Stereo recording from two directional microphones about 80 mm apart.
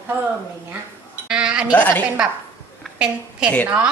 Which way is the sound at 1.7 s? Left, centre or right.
Left.